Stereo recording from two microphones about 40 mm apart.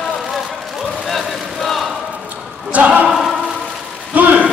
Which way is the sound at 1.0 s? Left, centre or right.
Centre.